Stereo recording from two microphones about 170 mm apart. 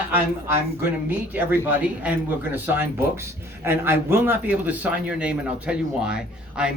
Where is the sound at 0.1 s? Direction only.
10° right (ahead or behind).